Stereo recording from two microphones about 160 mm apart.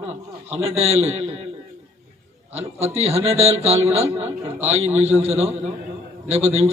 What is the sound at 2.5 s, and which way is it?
A man's voice, 40° right (ahead or behind).